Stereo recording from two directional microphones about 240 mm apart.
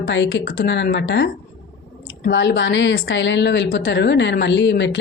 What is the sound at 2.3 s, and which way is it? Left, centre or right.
A woman's voice, left.